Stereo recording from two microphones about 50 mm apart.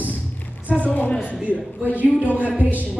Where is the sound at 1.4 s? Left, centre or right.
Right.